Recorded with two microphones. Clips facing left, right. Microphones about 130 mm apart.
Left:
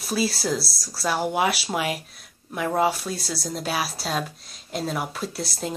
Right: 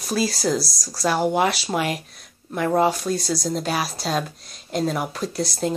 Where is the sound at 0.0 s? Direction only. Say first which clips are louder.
Right 2 dB; 5° left (ahead or behind).